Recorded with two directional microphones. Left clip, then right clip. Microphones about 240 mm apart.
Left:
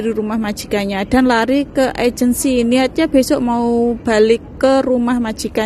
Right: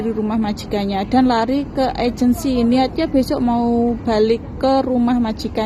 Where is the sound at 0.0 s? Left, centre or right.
Left.